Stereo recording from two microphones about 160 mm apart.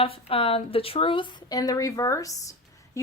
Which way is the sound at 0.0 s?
35° left (ahead or behind).